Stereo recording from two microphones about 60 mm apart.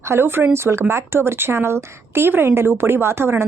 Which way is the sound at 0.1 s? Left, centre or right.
Right.